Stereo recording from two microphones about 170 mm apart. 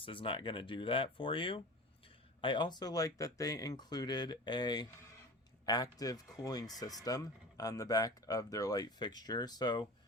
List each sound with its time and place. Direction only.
0.0 s speech: 30° left (ahead or behind)